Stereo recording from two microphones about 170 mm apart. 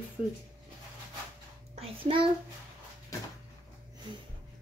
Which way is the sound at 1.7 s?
35° right (ahead or behind).